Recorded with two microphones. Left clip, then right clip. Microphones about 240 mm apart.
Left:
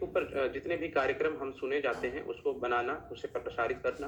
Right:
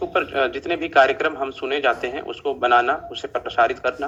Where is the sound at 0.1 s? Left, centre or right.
Right.